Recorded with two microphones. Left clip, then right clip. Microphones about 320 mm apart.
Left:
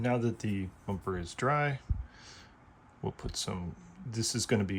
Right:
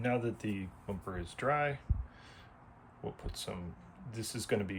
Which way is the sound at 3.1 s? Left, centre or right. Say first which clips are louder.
Left 5 dB; centre.